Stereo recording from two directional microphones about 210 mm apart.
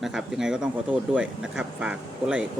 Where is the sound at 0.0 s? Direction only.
Centre (ahead or behind).